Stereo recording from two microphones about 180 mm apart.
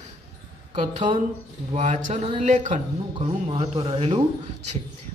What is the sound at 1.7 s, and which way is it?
Speech, 45° right (ahead or behind).